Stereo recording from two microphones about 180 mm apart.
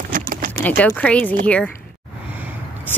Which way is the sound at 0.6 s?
10° left (ahead or behind).